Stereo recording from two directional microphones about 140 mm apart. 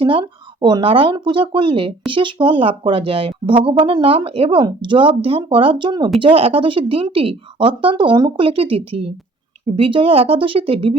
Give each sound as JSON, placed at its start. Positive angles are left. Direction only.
{"t": 0.0, "sound": "speech", "side_deg": -40}